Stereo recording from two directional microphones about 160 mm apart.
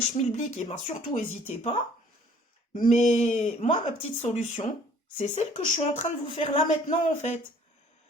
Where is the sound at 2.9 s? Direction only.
45° left (ahead or behind).